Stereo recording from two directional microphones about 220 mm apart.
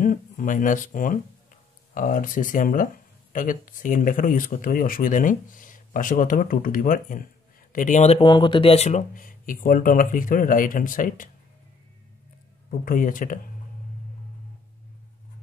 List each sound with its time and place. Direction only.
0.0 s speech: 35° left (ahead or behind)
12.8 s speech: 40° left (ahead or behind)